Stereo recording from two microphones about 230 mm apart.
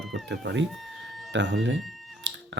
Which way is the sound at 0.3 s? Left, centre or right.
Right.